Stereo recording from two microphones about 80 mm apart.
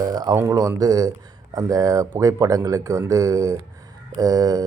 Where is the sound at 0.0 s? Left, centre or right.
Right.